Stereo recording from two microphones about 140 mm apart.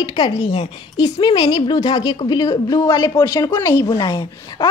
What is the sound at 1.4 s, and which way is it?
A woman's voice, 40° left (ahead or behind).